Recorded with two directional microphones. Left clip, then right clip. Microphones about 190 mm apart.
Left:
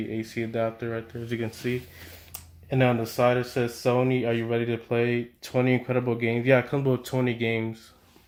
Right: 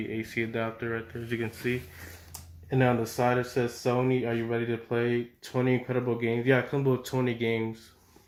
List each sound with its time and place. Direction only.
0.1 s speech: 50° left (ahead or behind)